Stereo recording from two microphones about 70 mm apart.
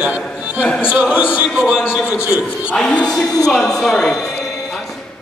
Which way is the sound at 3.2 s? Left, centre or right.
Left.